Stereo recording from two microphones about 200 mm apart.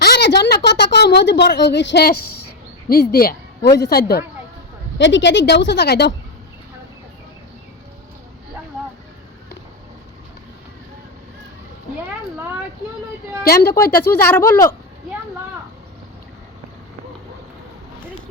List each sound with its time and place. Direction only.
0.0 s a woman's voice: 55° left (ahead or behind)
4.9 s a woman's voice: 65° left (ahead or behind)
13.4 s speech: 50° left (ahead or behind)
14.0 s speech: 10° left (ahead or behind)